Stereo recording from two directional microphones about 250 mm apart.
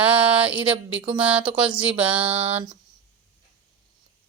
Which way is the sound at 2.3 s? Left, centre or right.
Right.